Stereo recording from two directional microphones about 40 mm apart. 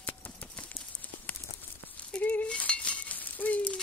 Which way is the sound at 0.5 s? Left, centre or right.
Left.